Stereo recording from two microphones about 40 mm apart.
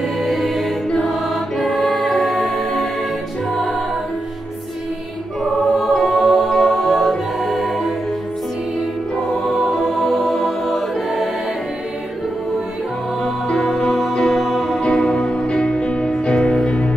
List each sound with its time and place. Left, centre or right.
0.2 s music: centre
3.5 s music: left
5.4 s music: centre
9.5 s music: centre
13.2 s music: centre
14.8 s music: left